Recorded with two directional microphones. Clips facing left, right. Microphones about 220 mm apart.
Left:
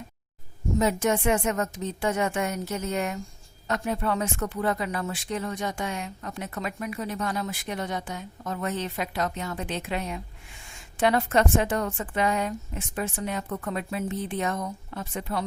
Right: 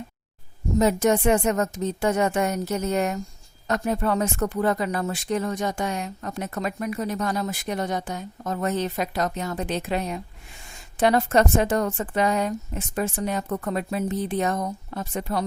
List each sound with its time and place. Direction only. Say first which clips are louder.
0.8 s speech: right 4 dB; 40° right (ahead or behind)